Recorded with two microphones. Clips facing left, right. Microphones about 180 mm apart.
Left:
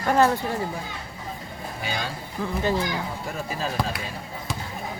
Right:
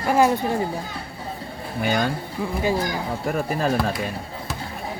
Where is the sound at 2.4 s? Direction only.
10° right (ahead or behind).